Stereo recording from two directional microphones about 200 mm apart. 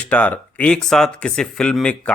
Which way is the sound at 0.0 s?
5° left (ahead or behind).